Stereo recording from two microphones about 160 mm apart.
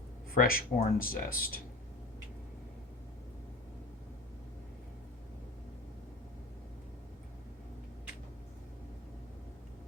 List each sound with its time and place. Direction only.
0.3 s speech: 65° left (ahead or behind)